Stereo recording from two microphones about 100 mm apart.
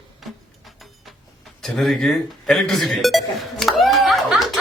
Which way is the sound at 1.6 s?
Centre (ahead or behind).